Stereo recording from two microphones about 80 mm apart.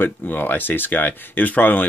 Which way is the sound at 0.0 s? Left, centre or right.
Left.